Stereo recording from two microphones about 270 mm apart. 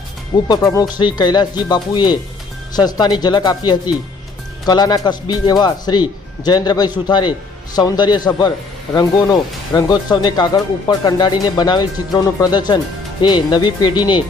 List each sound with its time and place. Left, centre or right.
0.4 s speech: centre